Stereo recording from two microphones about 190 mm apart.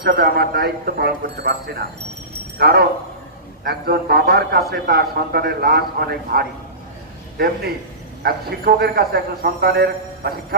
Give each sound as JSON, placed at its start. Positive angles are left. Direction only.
{"t": 0.0, "sound": "a man's voice", "side_deg": -55}